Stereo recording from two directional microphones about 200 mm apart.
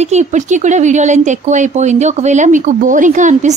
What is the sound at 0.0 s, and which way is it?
Speech, 35° right (ahead or behind).